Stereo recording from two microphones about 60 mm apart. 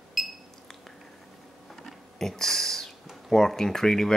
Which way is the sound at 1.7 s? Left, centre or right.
Centre.